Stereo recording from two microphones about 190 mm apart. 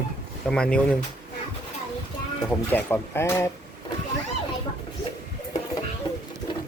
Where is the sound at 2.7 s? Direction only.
10° left (ahead or behind).